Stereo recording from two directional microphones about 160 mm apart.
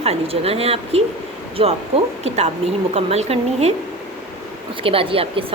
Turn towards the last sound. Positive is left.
turn(degrees=-35)  # may be behind; listen again after turning